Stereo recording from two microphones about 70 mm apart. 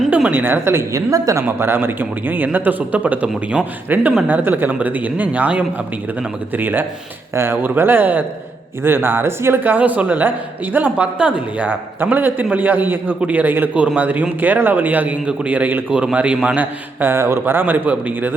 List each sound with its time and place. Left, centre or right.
0.3 s a woman's voice: right
1.1 s speech: right
1.5 s a woman's voice: right